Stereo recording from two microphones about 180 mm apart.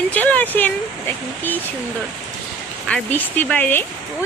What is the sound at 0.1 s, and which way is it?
Speech, 10° left (ahead or behind).